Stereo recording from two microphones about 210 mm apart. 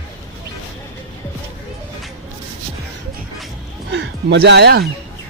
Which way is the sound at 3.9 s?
55° right (ahead or behind).